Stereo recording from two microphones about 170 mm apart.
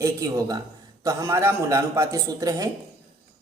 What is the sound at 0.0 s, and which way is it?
A man's voice, 20° right (ahead or behind).